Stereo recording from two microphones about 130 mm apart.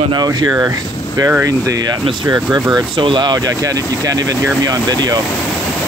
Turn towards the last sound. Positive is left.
turn(degrees=-30)  # may be behind; listen again after turning